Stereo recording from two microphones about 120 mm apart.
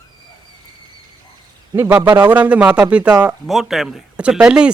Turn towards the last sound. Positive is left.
turn(degrees=-10)  # may be behind; listen again after turning